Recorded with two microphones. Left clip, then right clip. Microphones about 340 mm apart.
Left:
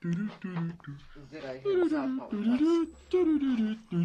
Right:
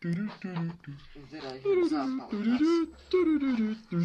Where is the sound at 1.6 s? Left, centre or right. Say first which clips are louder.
Right 1 dB; centre.